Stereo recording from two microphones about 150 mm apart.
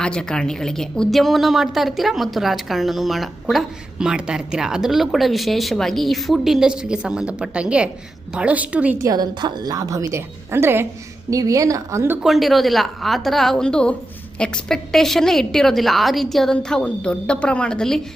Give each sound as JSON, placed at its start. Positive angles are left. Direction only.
{"t": 0.0, "sound": "a woman's voice", "side_deg": 5}
{"t": 9.0, "sound": "a woman's voice", "side_deg": -30}
{"t": 12.2, "sound": "speech", "side_deg": 0}